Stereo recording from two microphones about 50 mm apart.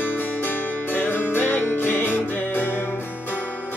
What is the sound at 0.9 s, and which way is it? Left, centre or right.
Music, left.